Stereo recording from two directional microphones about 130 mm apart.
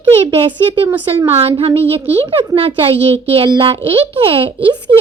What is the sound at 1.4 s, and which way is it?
A woman's voice, 50° right (ahead or behind).